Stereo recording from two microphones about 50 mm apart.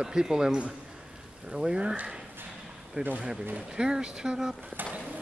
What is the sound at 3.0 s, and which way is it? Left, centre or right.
Speech, right.